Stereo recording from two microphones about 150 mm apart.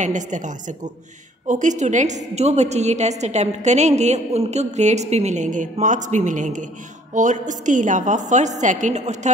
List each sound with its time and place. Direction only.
0.0 s a woman's voice: 55° right (ahead or behind)